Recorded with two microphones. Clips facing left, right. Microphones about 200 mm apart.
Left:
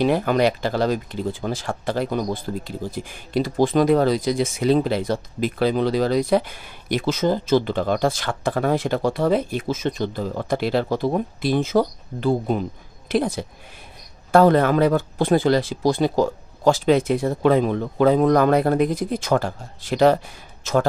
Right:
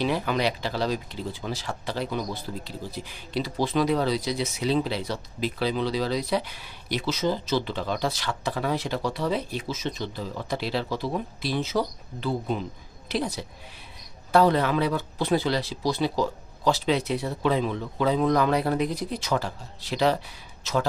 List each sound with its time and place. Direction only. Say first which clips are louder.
0.0 s speech: left 7 dB; 50° left (ahead or behind)